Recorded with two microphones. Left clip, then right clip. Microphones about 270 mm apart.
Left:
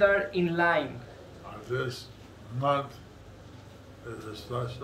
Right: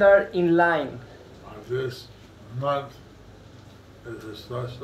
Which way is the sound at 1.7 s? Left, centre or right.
Centre.